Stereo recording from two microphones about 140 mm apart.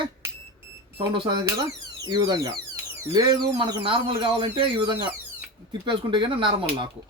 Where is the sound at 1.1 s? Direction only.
35° right (ahead or behind).